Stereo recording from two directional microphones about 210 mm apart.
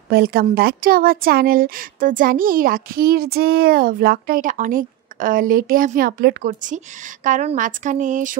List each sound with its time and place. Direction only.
0.1 s a woman's voice: 45° right (ahead or behind)